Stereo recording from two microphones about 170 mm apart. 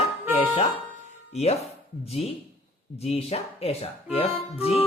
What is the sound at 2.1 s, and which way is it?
Speech, 35° left (ahead or behind).